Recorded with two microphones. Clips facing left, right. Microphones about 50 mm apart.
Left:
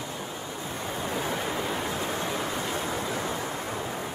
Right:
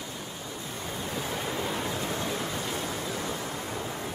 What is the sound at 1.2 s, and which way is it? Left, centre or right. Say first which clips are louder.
Waves: left 1 dB; centre.